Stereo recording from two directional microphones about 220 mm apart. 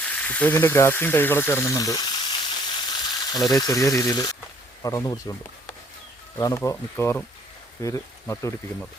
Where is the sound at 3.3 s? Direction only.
15° left (ahead or behind).